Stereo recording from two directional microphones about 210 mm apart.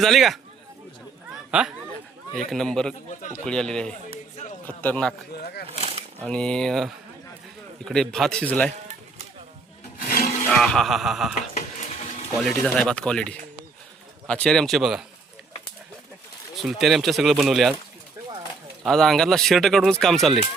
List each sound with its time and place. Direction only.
0.0 s speech: centre (ahead or behind)
1.5 s speech: 5° right (ahead or behind)
3.2 s speech: 35° left (ahead or behind)
3.4 s speech: 5° left (ahead or behind)
4.1 s a sound: 35° left (ahead or behind)
4.6 s speech: 5° left (ahead or behind)
5.3 s speech: 50° left (ahead or behind)
5.7 s a sound: 30° right (ahead or behind)
6.2 s speech: 5° left (ahead or behind)
10.1 s a sound: 40° left (ahead or behind)
10.4 s speech: 5° left (ahead or behind)
12.4 s speech: centre (ahead or behind)
16.6 s speech: centre (ahead or behind)
18.8 s speech: centre (ahead or behind)